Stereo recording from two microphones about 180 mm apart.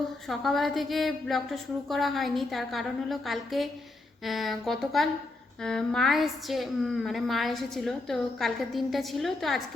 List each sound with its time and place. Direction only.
0.3 s a woman's voice: centre (ahead or behind)